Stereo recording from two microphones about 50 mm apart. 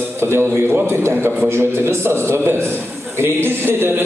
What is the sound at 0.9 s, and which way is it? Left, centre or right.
A man's voice, right.